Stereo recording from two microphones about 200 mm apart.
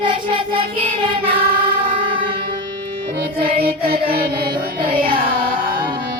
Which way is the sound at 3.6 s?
50° right (ahead or behind).